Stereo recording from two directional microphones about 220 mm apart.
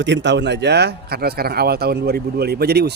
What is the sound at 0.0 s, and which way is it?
Speech, 55° right (ahead or behind).